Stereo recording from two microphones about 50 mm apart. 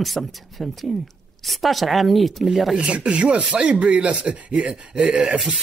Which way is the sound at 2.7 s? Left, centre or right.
Right.